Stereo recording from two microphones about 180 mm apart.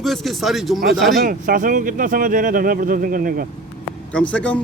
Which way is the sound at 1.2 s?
50° right (ahead or behind).